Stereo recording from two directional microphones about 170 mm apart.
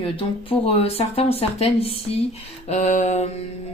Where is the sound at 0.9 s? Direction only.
35° left (ahead or behind).